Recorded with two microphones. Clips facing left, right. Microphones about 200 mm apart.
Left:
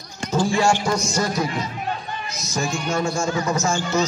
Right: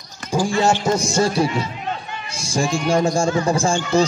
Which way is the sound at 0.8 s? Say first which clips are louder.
Right 4 dB; 25° right (ahead or behind).